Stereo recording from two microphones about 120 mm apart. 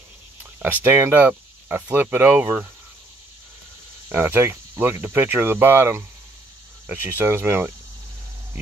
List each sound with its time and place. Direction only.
0.4 s speech: 15° right (ahead or behind)
4.1 s speech: 15° right (ahead or behind)